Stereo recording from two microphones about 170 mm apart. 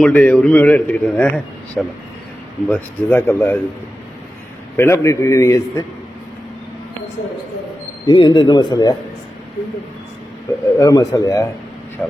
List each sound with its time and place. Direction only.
0.0 s a man's voice: 5° left (ahead or behind)
4.8 s a man's voice: 15° left (ahead or behind)
8.0 s speech: 25° left (ahead or behind)
10.8 s speech: 20° left (ahead or behind)
12.0 s speech: 5° left (ahead or behind)